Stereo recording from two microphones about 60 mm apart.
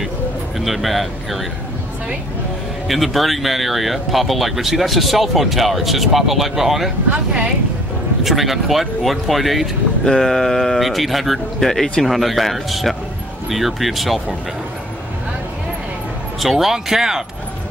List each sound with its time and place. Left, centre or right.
0.6 s speech: centre
2.9 s speech: centre
7.1 s speech: right
8.2 s speech: centre
16.3 s speech: centre